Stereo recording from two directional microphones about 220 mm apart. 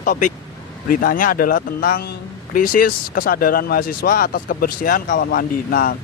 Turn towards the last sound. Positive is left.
turn(degrees=40)  # may be behind; listen again after turning